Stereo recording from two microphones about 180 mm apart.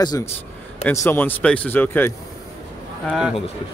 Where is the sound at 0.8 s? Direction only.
10° left (ahead or behind).